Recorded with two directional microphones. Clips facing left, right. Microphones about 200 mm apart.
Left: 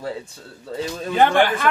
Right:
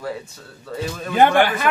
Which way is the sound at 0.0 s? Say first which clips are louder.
Even; 30° left (ahead or behind).